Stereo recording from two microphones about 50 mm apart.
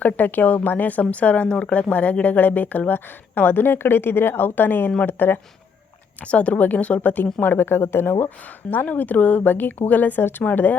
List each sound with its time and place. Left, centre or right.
0.0 s speech: left
1.8 s a woman's voice: left
6.2 s a woman's voice: left
7.4 s a woman's voice: left
8.9 s speech: left